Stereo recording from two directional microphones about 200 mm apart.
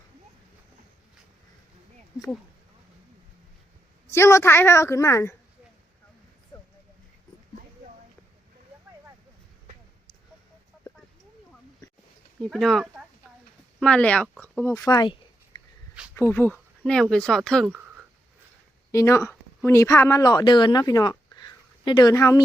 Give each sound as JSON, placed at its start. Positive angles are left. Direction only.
{"t": 4.1, "sound": "a woman's voice", "side_deg": 15}
{"t": 6.5, "sound": "a sound", "side_deg": 20}
{"t": 12.4, "sound": "speech", "side_deg": 0}
{"t": 16.1, "sound": "speech", "side_deg": 10}
{"t": 18.9, "sound": "a woman's voice", "side_deg": 15}